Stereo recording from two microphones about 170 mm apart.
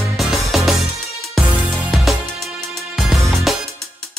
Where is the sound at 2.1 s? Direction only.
Centre (ahead or behind).